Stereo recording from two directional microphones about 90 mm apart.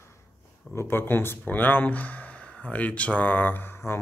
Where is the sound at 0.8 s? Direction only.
25° left (ahead or behind).